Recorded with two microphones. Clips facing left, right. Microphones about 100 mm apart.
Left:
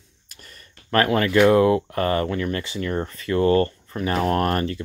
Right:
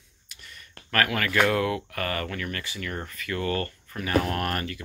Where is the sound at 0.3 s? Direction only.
40° left (ahead or behind).